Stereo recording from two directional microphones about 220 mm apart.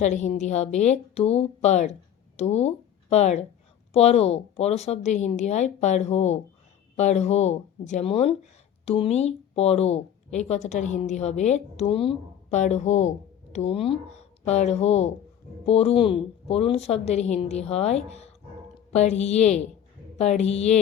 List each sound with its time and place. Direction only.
0.0 s a woman's voice: 30° left (ahead or behind)